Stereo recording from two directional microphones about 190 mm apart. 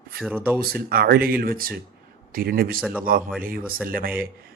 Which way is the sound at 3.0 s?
50° right (ahead or behind).